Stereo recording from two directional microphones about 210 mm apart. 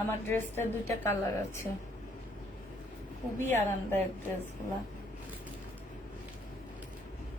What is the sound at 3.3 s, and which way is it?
Speech, 10° left (ahead or behind).